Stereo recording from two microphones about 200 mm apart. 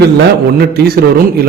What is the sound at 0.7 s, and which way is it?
Speech, 50° right (ahead or behind).